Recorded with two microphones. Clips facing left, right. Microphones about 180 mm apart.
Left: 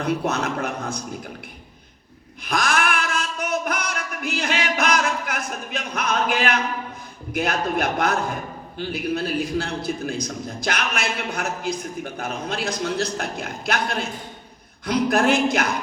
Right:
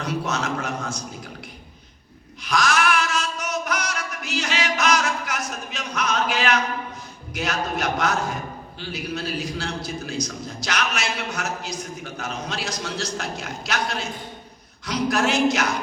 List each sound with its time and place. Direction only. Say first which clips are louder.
0.0 s a man's voice: left 3 dB; 55° left (ahead or behind)
2.4 s a sound: right 1 dB; 55° left (ahead or behind)
7.3 s a man's voice: left 4 dB; 55° left (ahead or behind)